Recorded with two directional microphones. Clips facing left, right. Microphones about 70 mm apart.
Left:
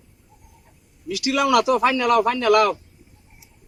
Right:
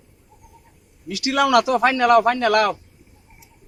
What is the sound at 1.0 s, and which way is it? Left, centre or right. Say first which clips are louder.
A man's voice: right 1 dB; right.